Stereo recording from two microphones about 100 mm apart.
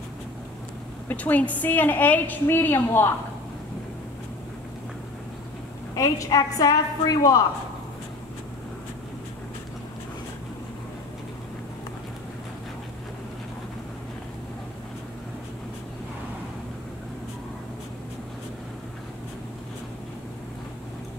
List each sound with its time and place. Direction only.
1.0 s a woman's voice: 15° left (ahead or behind)
5.9 s a woman's voice: 35° left (ahead or behind)